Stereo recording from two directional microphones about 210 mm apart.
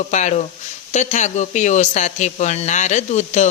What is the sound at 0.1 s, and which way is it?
Speech, 35° left (ahead or behind).